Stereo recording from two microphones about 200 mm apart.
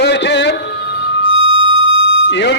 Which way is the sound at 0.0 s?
60° left (ahead or behind).